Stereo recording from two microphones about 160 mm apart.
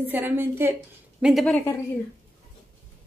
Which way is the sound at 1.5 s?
15° left (ahead or behind).